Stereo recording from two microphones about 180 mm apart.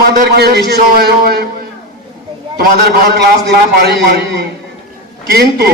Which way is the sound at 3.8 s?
65° right (ahead or behind).